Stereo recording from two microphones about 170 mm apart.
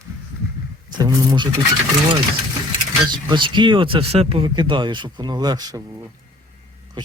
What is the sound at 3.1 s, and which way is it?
Speech, 25° right (ahead or behind).